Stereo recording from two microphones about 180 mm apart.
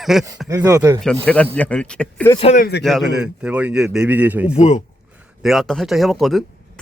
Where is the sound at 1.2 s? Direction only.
5° left (ahead or behind).